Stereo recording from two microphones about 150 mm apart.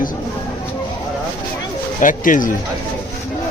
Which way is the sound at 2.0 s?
60° left (ahead or behind).